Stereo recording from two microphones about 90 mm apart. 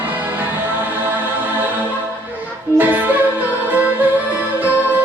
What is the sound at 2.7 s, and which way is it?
Music, 20° right (ahead or behind).